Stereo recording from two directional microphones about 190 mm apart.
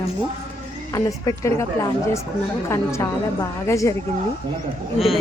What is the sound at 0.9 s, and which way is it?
A woman's voice, 15° left (ahead or behind).